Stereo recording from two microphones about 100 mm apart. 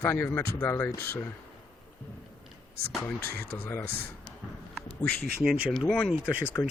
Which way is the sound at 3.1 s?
25° left (ahead or behind).